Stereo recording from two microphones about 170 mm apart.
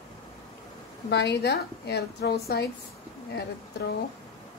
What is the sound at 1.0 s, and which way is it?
A woman's voice, 85° left.